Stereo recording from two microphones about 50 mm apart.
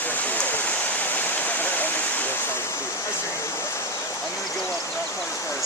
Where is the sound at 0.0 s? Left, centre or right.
Left.